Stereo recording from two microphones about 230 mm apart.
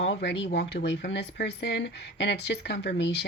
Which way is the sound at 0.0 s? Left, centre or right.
Left.